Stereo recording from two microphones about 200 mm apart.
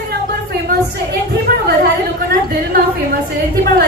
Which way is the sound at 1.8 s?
50° right (ahead or behind).